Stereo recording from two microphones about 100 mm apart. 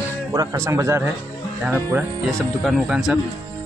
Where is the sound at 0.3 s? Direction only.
35° right (ahead or behind).